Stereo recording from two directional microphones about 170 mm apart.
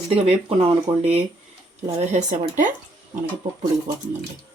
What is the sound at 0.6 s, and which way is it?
Speech, 35° right (ahead or behind).